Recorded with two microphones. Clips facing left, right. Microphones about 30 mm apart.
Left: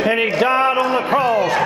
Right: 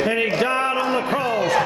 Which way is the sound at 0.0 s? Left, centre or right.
Centre.